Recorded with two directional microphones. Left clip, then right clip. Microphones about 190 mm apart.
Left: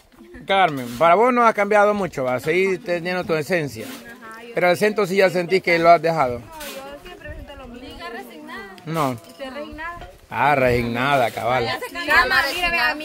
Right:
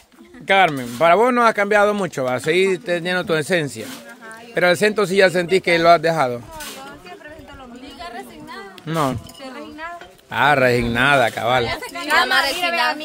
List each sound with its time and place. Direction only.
0.5 s speech: 15° right (ahead or behind)
8.0 s a sound: 15° right (ahead or behind)
10.3 s speech: 15° right (ahead or behind)
12.3 s a woman's voice: 55° right (ahead or behind)